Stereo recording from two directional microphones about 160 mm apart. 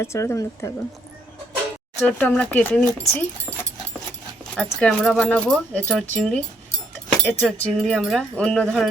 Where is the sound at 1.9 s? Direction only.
10° left (ahead or behind).